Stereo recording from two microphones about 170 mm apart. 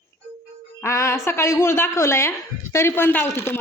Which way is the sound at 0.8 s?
15° left (ahead or behind).